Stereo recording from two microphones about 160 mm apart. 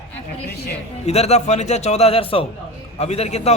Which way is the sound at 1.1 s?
40° left (ahead or behind).